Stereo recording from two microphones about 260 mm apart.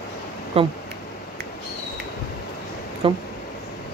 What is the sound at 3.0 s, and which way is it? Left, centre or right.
Speech, right.